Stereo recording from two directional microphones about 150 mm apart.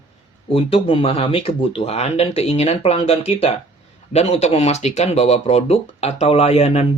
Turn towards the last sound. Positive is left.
turn(degrees=45)  # may be behind; listen again after turning